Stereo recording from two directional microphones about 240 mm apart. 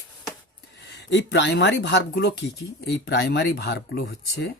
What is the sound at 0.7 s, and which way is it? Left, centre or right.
Speech, left.